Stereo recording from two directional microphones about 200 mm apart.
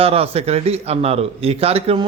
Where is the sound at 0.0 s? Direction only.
30° right (ahead or behind).